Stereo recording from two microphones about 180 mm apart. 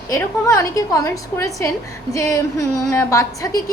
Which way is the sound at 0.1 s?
20° left (ahead or behind).